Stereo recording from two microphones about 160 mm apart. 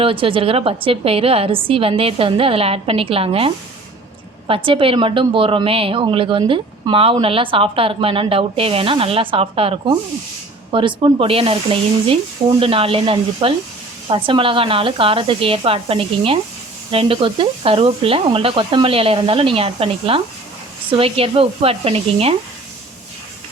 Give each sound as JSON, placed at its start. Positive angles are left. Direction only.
{"t": 0.0, "sound": "a woman's voice", "side_deg": -35}